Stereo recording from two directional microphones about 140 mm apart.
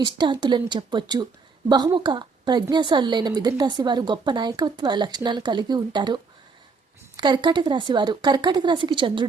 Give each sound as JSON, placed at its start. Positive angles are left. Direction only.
{"t": 0.0, "sound": "a woman's voice", "side_deg": -30}
{"t": 7.2, "sound": "a woman's voice", "side_deg": -35}